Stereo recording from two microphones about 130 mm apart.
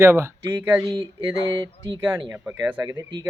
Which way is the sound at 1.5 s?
35° right (ahead or behind).